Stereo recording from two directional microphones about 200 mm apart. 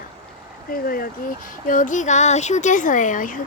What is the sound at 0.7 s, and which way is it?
A woman's voice, 45° left (ahead or behind).